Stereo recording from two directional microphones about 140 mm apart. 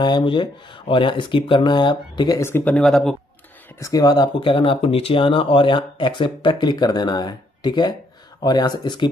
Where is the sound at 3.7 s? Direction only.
25° left (ahead or behind).